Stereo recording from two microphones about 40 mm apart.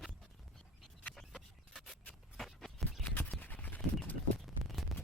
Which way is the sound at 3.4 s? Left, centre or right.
Left.